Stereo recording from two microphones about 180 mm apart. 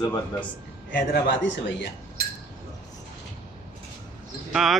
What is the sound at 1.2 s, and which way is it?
Speech, 80° left.